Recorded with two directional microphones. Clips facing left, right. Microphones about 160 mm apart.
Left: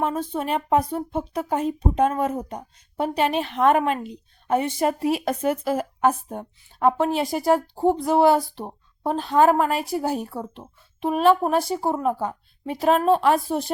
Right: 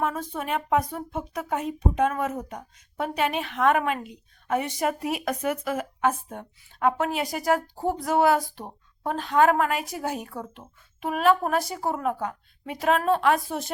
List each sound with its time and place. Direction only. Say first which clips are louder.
0.0 s speech: left 4 dB; 30° left (ahead or behind)